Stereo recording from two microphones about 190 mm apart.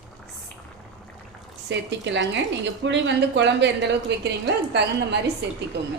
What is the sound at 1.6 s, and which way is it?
A woman's voice, 65° right (ahead or behind).